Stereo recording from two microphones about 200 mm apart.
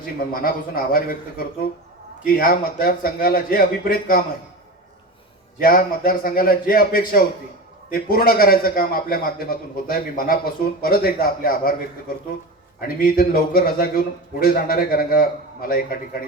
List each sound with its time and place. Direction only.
0.0 s a man's voice: 45° left (ahead or behind)
2.2 s a man's voice: 45° left (ahead or behind)
5.5 s a man's voice: 45° left (ahead or behind)